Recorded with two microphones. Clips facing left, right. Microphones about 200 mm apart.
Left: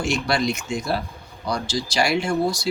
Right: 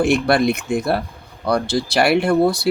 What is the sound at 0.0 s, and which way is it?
Speech, 55° right (ahead or behind).